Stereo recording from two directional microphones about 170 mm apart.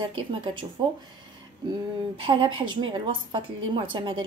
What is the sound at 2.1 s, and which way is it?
Speech, 30° right (ahead or behind).